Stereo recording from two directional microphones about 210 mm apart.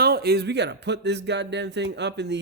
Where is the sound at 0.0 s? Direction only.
50° right (ahead or behind).